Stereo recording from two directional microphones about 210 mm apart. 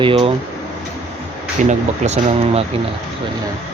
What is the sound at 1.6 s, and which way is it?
Speech, 35° right (ahead or behind).